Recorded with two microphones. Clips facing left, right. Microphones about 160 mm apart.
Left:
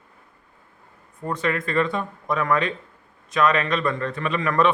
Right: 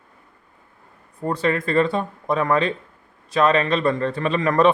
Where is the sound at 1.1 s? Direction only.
35° right (ahead or behind).